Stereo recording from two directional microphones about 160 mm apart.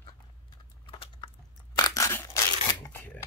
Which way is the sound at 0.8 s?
30° left (ahead or behind).